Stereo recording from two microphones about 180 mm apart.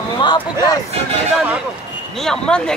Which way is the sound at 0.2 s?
25° left (ahead or behind).